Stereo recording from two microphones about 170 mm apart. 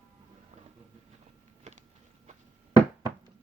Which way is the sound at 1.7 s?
45° right (ahead or behind).